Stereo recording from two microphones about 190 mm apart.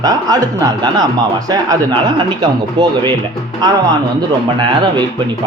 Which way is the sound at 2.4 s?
25° right (ahead or behind).